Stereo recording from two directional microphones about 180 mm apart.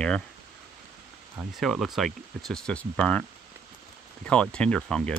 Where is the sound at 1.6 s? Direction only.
Centre (ahead or behind).